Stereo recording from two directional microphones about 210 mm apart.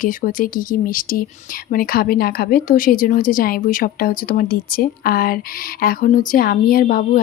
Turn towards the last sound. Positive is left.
turn(degrees=40)  # may be behind; listen again after turning